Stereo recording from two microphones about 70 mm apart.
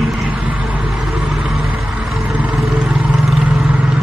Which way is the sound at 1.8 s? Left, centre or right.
Centre.